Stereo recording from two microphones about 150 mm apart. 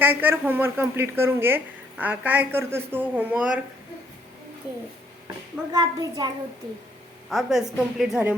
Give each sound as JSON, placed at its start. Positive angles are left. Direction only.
{"t": 0.0, "sound": "a woman's voice", "side_deg": -10}
{"t": 5.7, "sound": "a child's voice", "side_deg": -25}
{"t": 7.3, "sound": "a woman's voice", "side_deg": 0}